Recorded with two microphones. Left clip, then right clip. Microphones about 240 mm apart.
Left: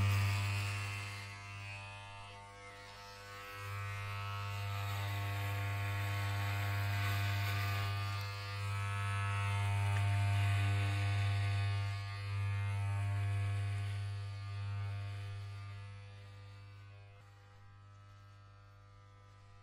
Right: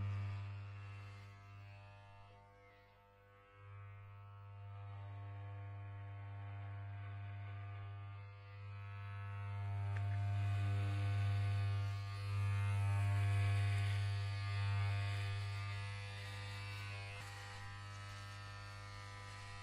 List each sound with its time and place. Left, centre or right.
0.0 s music: left
3.4 s music: left; by 15.2 s centre